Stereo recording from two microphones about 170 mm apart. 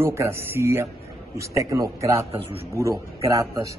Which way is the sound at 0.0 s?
15° right (ahead or behind).